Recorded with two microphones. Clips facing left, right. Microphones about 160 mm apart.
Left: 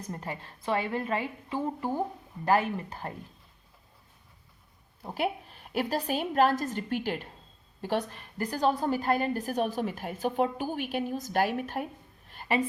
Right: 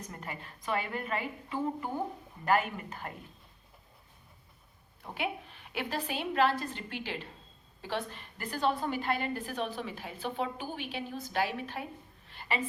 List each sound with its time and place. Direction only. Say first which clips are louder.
0.1 s a woman's voice: left 5 dB; 35° left (ahead or behind)
5.0 s a woman's voice: left 5 dB; 40° left (ahead or behind)
12.3 s a sound: left 6 dB; 45° left (ahead or behind)